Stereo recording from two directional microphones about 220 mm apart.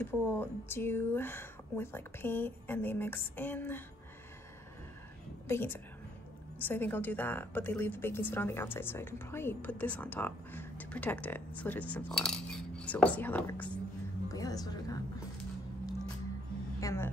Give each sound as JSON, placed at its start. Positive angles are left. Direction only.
{"t": 0.0, "sound": "a woman's voice", "side_deg": 10}
{"t": 5.5, "sound": "a woman's voice", "side_deg": 10}
{"t": 14.3, "sound": "music", "side_deg": 15}
{"t": 16.8, "sound": "a woman's voice", "side_deg": 10}